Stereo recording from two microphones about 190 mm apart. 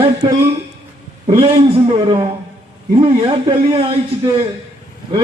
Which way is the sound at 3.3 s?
30° right (ahead or behind).